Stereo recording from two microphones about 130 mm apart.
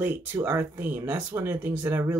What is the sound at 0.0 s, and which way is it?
Speech, 15° right (ahead or behind).